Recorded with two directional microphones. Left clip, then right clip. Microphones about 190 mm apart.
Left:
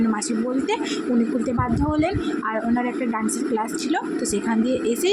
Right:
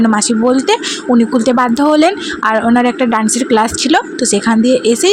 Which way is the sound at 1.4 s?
50° right (ahead or behind).